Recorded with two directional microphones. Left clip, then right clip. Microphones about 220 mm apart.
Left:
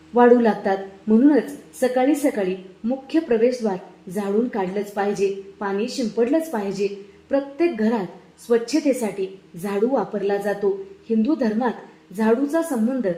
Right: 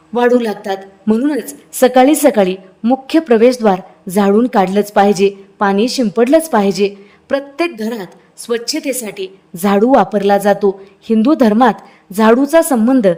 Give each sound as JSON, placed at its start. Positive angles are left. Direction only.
{"t": 0.1, "sound": "a woman's voice", "side_deg": -50}